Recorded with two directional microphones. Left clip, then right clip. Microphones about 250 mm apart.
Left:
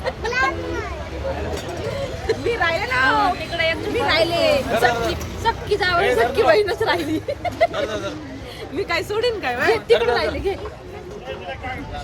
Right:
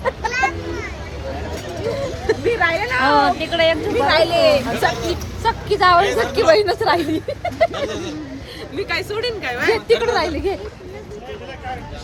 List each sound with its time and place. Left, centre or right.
2.2 s a sound: right
3.5 s speech: right
8.7 s speech: centre
9.7 s speech: centre